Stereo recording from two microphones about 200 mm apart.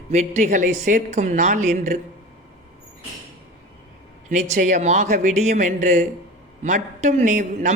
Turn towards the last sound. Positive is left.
turn(degrees=-35)  # may be behind; listen again after turning